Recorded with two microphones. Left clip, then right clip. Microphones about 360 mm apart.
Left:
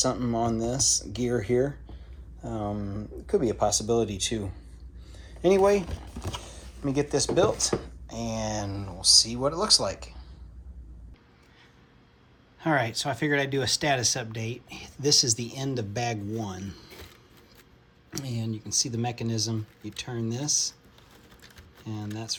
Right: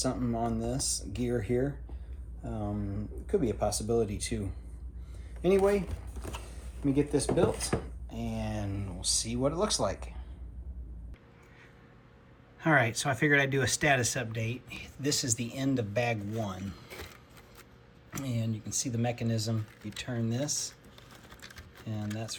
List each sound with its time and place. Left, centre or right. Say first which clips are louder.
0.0 s speech: left 5 dB; centre
3.3 s speech: left 5 dB; centre
5.4 s speech: left 5 dB; centre
6.9 s speech: left 4 dB; left
12.5 s speech: even; centre
18.1 s speech: left 2 dB; centre
21.4 s a sound: left 2 dB; centre